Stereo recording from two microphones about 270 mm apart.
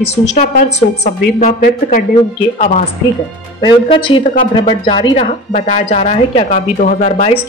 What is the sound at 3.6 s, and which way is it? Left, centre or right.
Speech, centre.